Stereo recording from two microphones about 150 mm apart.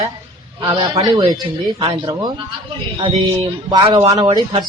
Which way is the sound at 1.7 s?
35° right (ahead or behind).